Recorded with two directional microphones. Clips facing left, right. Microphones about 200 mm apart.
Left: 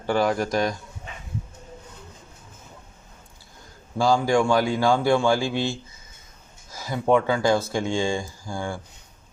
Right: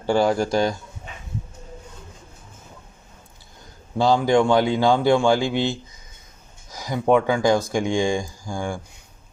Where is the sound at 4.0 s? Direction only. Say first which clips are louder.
Right 2 dB; 20° right (ahead or behind).